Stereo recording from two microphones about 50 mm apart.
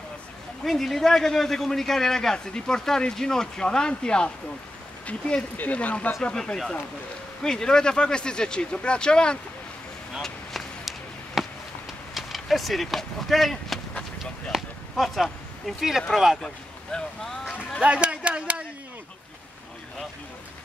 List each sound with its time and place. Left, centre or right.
0.7 s a man's voice: centre
5.6 s speech: left
6.3 s a man's voice: centre
10.2 s a sound: centre
11.4 s a sound: centre
12.1 s speech: centre
14.5 s a sound: centre
15.0 s speech: centre
16.1 s speech: centre
16.4 s speech: centre
17.8 s speech: right